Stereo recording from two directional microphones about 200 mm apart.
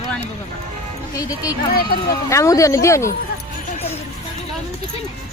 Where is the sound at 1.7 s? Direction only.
50° left (ahead or behind).